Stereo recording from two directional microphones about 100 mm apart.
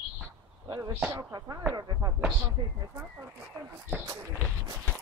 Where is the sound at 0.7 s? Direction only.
35° right (ahead or behind).